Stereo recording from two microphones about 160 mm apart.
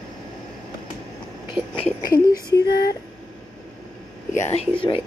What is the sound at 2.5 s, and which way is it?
Female singing, 85° left.